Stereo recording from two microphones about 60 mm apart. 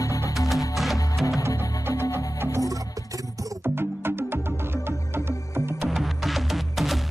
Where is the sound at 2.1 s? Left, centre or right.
Right.